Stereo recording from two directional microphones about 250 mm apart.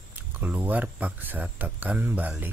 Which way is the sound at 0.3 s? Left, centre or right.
Centre.